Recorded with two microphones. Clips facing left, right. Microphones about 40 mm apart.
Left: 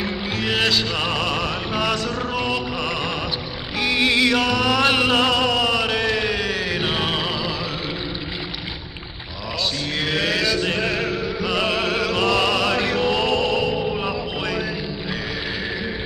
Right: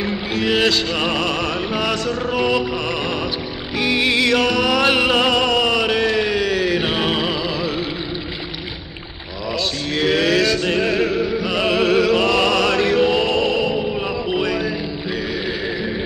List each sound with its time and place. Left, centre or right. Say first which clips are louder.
0.4 s music: right 3 dB; centre
1.3 s music: right 2 dB; centre
1.7 s music: right 2 dB; centre
4.3 s music: right 2 dB; centre
4.8 s music: right 1 dB; centre
5.6 s a sound: right 3 dB; centre
6.8 s music: right 3 dB; centre
9.5 s a sound: right 2 dB; centre
10.8 s music: right 5 dB; centre
11.1 s music: right 5 dB; right
11.4 s music: right 2 dB; centre
12.4 s music: right 3 dB; centre
12.9 s music: right 3 dB; centre